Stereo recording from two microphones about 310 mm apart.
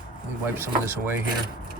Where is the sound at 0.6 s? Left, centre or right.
Centre.